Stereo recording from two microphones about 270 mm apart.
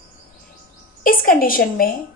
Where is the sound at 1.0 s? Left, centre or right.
Left.